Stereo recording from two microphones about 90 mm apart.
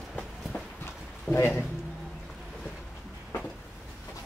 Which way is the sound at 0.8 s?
25° left (ahead or behind).